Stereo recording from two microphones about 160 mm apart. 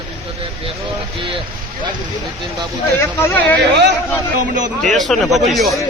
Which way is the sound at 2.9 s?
15° left (ahead or behind).